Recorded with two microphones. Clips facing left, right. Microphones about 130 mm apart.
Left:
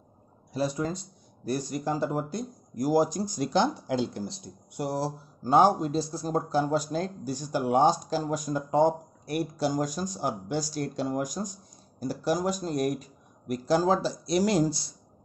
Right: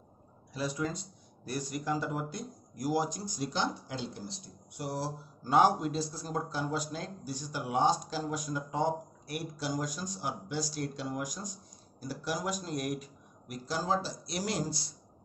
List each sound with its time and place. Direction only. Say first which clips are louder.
0.5 s speech: left 5 dB; 35° left (ahead or behind)
3.3 s speech: left 8 dB; 65° left (ahead or behind)
4.7 s speech: left 6 dB; 40° left (ahead or behind)
13.7 s speech: left 6 dB; 85° left